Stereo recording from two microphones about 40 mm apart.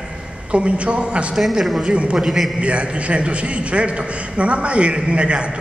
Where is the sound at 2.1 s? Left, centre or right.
Centre.